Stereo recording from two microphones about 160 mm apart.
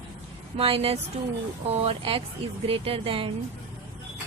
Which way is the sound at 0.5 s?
35° right (ahead or behind).